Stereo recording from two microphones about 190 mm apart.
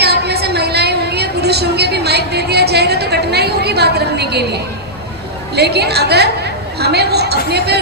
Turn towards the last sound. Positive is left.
turn(degrees=-60)  # may be behind; listen again after turning